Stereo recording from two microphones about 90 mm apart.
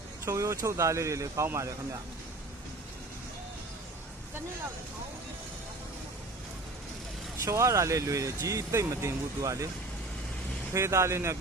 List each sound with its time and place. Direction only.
0.3 s speech: 35° right (ahead or behind)
7.4 s speech: 35° right (ahead or behind)
10.8 s speech: 30° right (ahead or behind)